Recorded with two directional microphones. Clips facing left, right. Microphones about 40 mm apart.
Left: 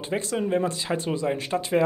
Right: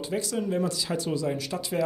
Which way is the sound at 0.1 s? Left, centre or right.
Left.